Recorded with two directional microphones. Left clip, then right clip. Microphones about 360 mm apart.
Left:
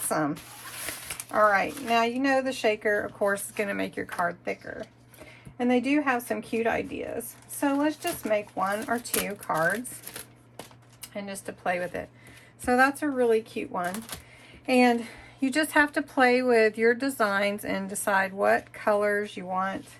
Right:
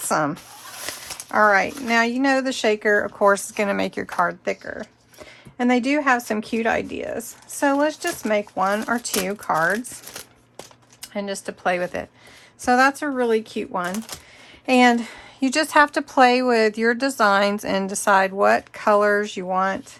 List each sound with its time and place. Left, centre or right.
0.1 s speech: centre
11.0 s speech: right